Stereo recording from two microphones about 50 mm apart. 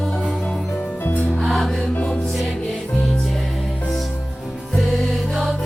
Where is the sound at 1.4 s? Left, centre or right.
Centre.